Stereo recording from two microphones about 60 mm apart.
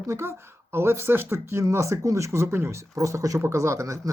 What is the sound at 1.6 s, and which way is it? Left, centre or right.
Speech, right.